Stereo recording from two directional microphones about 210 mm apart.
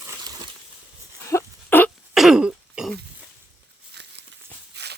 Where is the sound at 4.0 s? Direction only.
55° right (ahead or behind).